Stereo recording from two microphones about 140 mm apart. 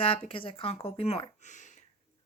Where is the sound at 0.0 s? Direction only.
40° left (ahead or behind).